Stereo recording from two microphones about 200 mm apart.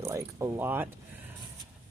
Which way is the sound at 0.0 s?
15° right (ahead or behind).